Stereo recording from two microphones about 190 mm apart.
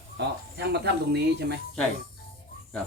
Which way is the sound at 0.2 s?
60° right (ahead or behind).